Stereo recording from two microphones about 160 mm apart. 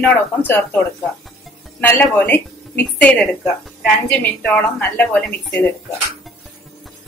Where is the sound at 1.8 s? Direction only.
10° left (ahead or behind).